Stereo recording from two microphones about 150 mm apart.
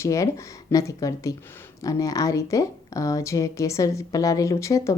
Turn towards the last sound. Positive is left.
turn(degrees=20)  # may be behind; listen again after turning